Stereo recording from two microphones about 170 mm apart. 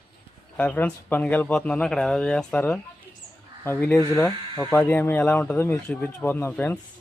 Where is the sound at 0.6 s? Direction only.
10° left (ahead or behind).